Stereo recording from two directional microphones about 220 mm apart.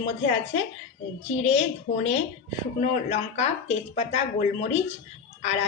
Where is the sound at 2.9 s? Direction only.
30° left (ahead or behind).